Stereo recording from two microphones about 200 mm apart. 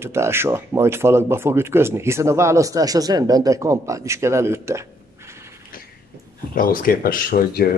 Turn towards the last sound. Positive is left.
turn(degrees=45)  # may be behind; listen again after turning